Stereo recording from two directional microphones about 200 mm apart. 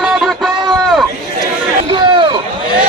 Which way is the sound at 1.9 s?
25° right (ahead or behind).